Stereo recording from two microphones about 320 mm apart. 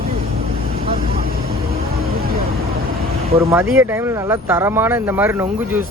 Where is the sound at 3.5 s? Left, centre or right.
Centre.